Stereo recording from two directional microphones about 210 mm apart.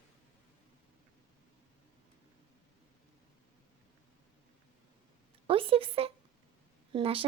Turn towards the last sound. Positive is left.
turn(degrees=-25)  # may be behind; listen again after turning